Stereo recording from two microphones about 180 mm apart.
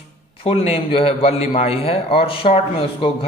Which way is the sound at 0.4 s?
35° left (ahead or behind).